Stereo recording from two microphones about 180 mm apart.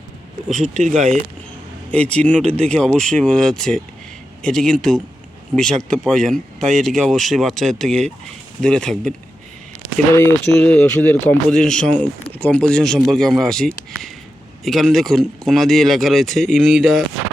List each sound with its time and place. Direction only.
0.5 s speech: 40° right (ahead or behind)
1.9 s speech: 5° left (ahead or behind)
10.2 s speech: 15° left (ahead or behind)